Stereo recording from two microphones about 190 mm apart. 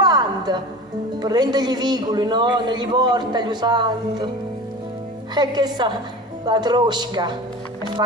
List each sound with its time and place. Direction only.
0.0 s a sound: 20° right (ahead or behind)
1.2 s a man's voice: 20° right (ahead or behind)
5.3 s a man's voice: 20° right (ahead or behind)